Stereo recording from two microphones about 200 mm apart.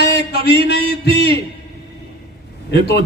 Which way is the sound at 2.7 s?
55° left (ahead or behind).